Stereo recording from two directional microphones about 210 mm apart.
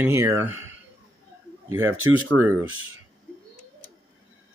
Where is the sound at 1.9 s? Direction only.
75° right (ahead or behind).